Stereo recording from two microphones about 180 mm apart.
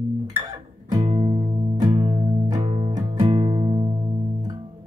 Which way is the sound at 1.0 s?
30° right (ahead or behind).